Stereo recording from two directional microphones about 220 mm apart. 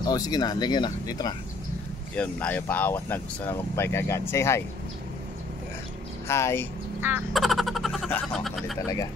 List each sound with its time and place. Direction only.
0.0 s speech: 20° left (ahead or behind)
2.1 s speech: 5° left (ahead or behind)
6.2 s speech: 10° left (ahead or behind)
7.0 s speech: 10° right (ahead or behind)
8.7 s speech: 15° left (ahead or behind)